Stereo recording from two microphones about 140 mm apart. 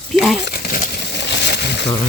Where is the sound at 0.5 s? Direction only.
75° left (ahead or behind).